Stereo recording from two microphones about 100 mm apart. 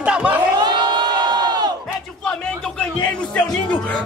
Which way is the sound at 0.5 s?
45° right (ahead or behind).